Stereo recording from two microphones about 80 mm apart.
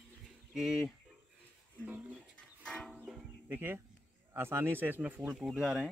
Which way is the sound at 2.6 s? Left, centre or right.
Centre.